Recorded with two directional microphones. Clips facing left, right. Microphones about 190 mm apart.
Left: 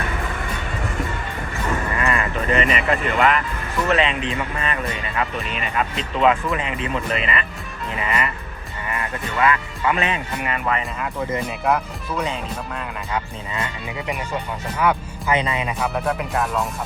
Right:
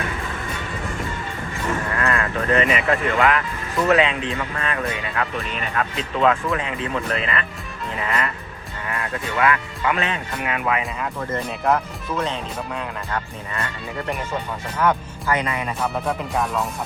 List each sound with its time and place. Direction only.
2.0 s speech: 5° left (ahead or behind)
10.5 s speech: 5° right (ahead or behind); by 13.7 s 15° left (ahead or behind)
14.8 s speech: 10° left (ahead or behind)
15.3 s speech: 20° left (ahead or behind)
16.0 s speech: centre (ahead or behind)